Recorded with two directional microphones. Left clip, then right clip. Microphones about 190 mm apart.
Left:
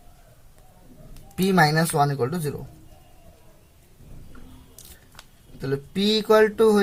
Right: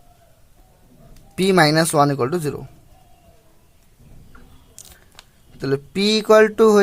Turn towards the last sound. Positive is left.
turn(degrees=-50)  # may be behind; listen again after turning